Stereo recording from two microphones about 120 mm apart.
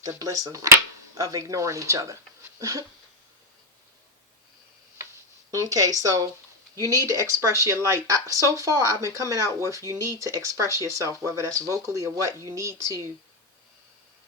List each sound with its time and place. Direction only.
0.0 s speech: 30° right (ahead or behind)
5.5 s speech: 30° right (ahead or behind)